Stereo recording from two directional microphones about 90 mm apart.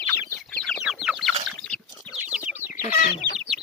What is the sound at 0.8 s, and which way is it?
Chicken, 5° right (ahead or behind).